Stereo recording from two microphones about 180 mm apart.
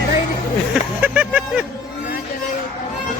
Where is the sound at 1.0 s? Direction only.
10° right (ahead or behind).